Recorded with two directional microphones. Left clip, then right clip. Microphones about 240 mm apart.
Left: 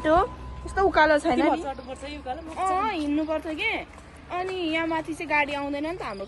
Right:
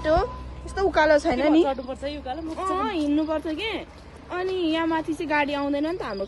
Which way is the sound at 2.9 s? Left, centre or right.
Centre.